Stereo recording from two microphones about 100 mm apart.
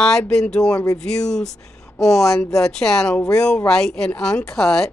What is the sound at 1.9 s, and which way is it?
Speech, 30° left (ahead or behind).